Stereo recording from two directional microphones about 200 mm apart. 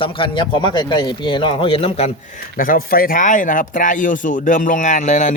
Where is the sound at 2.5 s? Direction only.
45° left (ahead or behind).